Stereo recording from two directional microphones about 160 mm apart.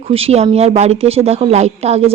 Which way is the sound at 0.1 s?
40° right (ahead or behind).